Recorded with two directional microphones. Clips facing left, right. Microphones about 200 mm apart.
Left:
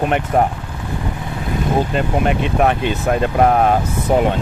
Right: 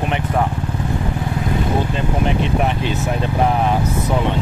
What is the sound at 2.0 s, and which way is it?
Speech, 60° left (ahead or behind).